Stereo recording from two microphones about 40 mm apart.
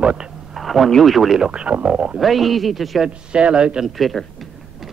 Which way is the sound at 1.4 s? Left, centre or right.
Right.